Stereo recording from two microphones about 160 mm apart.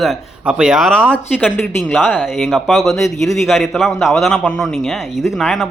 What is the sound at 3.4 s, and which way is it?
A man's voice, centre (ahead or behind).